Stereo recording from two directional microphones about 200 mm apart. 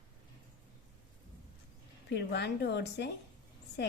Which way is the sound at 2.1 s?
55° left (ahead or behind).